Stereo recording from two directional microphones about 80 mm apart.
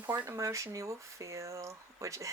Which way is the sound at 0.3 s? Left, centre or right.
Right.